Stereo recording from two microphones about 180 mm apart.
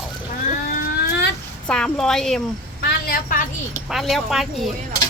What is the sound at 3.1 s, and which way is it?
Speech, 50° left (ahead or behind).